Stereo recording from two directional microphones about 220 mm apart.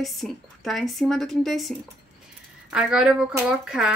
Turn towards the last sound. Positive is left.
turn(degrees=0)  # may be behind; listen again after turning